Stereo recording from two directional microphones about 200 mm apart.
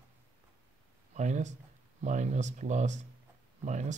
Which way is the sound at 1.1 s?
35° right (ahead or behind).